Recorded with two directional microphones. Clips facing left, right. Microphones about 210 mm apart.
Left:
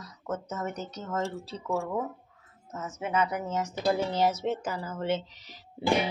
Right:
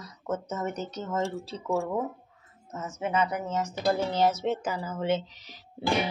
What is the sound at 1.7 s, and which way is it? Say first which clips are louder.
Speech: right 2 dB; 10° right (ahead or behind).